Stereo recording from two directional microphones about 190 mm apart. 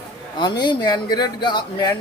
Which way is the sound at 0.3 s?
20° left (ahead or behind).